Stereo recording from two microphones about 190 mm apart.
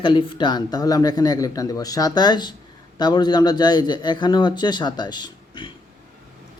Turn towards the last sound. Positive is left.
turn(degrees=25)  # may be behind; listen again after turning